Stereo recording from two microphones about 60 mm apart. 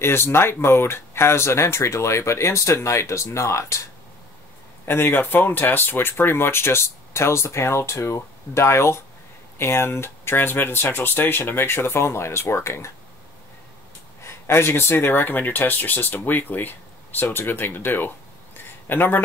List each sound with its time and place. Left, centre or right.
0.0 s speech: left
4.8 s speech: left
14.2 s speech: left